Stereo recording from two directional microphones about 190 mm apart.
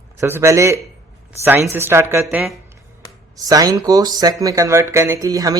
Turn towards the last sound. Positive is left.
turn(degrees=-20)  # may be behind; listen again after turning